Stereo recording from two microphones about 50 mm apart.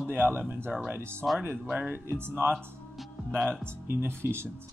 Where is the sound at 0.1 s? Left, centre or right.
Right.